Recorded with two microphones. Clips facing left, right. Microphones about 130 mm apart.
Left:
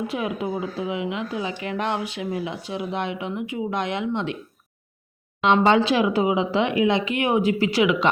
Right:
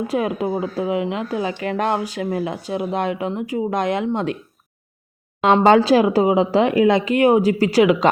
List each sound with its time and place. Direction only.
0.1 s speech: 40° right (ahead or behind)
5.6 s speech: 40° right (ahead or behind)